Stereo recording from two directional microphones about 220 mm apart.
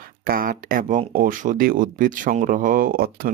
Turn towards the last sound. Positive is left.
turn(degrees=-40)  # may be behind; listen again after turning